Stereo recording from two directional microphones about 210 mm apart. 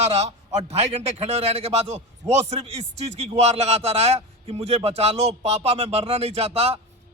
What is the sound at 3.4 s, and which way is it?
A man's voice, 30° right (ahead or behind).